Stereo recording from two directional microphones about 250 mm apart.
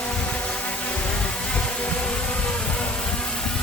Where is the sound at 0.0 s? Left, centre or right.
Centre.